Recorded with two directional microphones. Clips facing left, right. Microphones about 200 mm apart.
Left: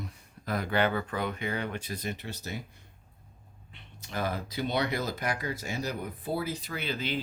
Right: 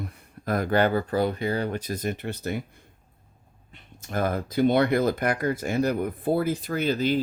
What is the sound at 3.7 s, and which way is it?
Speech, 50° right (ahead or behind).